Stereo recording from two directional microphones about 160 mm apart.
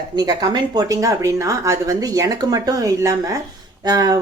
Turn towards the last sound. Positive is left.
turn(degrees=-25)  # may be behind; listen again after turning